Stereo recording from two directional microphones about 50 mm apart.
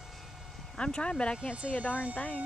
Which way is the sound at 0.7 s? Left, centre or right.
Centre.